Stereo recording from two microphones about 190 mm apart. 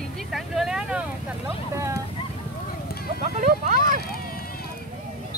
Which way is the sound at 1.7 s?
15° right (ahead or behind).